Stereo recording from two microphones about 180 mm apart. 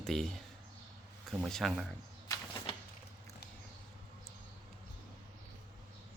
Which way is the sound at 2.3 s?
25° left (ahead or behind).